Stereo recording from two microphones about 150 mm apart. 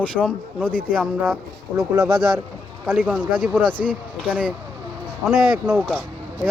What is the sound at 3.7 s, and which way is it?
Speech, 30° left (ahead or behind).